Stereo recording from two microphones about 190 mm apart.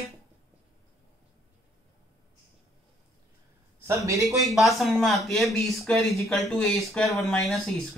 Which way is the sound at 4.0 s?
15° right (ahead or behind).